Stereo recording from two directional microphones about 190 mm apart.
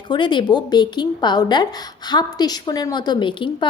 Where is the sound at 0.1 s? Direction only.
25° left (ahead or behind).